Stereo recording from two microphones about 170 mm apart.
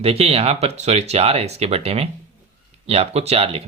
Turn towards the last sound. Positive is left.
turn(degrees=-35)  # may be behind; listen again after turning